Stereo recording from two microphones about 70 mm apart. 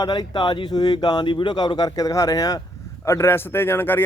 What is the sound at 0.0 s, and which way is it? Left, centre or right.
Speech, left.